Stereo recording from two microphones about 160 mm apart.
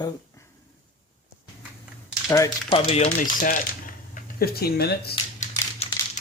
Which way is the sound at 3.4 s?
60° left (ahead or behind).